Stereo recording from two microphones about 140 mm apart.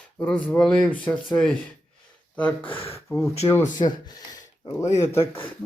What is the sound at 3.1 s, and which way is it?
Speech, 20° left (ahead or behind).